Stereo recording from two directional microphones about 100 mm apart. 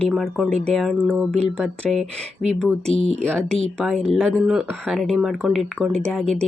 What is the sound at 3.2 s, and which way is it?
Speech, 10° left (ahead or behind).